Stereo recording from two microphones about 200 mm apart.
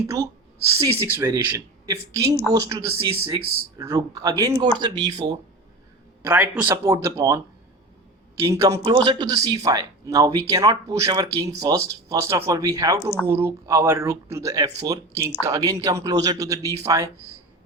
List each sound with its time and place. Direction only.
0.7 s speech: 15° right (ahead or behind)
6.2 s speech: 10° right (ahead or behind)
8.4 s speech: 15° right (ahead or behind)